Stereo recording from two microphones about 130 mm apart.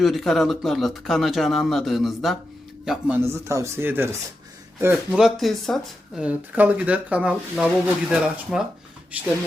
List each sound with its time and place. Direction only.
0.0 s speech: centre (ahead or behind)
3.2 s speech: 20° right (ahead or behind)
5.1 s speech: centre (ahead or behind)
6.2 s speech: 10° right (ahead or behind)